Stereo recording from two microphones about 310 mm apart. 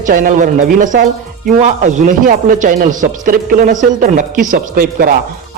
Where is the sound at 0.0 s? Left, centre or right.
Right.